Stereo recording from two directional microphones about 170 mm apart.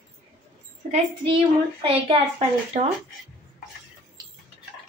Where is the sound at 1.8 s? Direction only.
35° right (ahead or behind).